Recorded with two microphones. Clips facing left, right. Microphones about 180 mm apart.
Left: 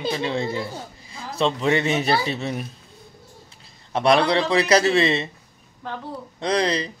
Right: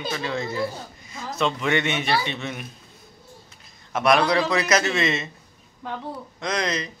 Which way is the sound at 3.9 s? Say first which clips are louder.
Left 1 dB; 30° left (ahead or behind).